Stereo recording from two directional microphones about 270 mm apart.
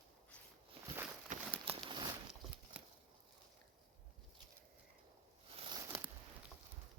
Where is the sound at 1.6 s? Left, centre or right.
Centre.